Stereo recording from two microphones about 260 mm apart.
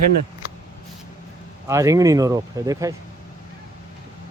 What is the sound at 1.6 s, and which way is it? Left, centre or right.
Speech, centre.